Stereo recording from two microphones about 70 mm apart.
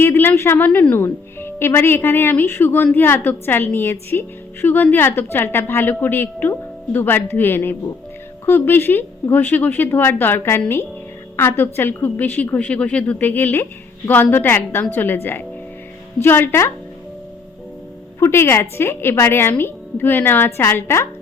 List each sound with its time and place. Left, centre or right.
0.0 s a woman's voice: left
18.2 s speech: left